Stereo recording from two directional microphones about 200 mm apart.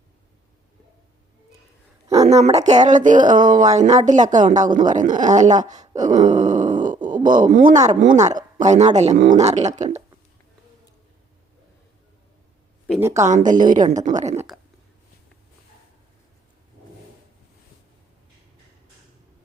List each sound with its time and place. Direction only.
2.2 s speech: 35° right (ahead or behind)
6.4 s grunt: 40° right (ahead or behind)
7.3 s speech: 40° right (ahead or behind)
13.0 s speech: 15° right (ahead or behind)
13.2 s speech: 40° right (ahead or behind)
14.3 s a sound: centre (ahead or behind)